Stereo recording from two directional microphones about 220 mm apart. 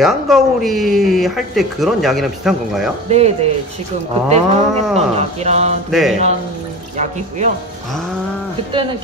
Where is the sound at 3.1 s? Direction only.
30° right (ahead or behind).